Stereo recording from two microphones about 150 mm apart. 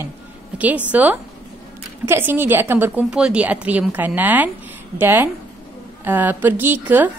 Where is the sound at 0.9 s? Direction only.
10° right (ahead or behind).